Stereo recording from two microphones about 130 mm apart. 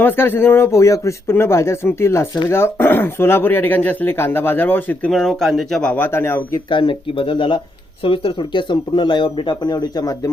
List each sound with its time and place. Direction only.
0.0 s speech: 15° left (ahead or behind)
5.1 s speech: centre (ahead or behind); by 6.6 s 20° left (ahead or behind)
6.7 s speech: 40° left (ahead or behind)